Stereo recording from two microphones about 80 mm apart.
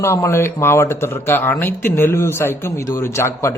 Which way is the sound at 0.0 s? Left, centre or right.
Left.